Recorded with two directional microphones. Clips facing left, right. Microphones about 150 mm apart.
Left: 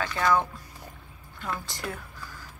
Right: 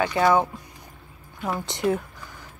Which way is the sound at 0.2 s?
30° right (ahead or behind).